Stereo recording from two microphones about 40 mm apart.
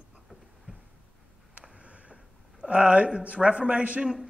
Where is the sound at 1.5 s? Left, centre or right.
Right.